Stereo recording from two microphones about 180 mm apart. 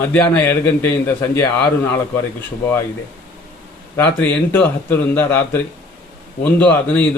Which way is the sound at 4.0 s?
10° left (ahead or behind).